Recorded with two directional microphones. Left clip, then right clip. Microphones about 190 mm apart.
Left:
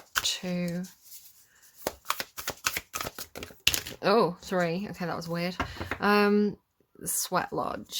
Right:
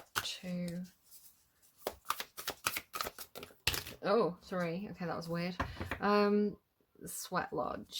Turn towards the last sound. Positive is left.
turn(degrees=20)  # may be behind; listen again after turning